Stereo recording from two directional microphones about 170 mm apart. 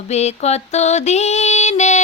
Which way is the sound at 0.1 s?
40° left (ahead or behind).